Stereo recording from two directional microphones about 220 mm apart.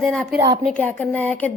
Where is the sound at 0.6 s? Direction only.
10° left (ahead or behind).